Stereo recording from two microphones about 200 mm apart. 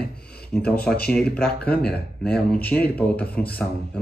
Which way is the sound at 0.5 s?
5° left (ahead or behind).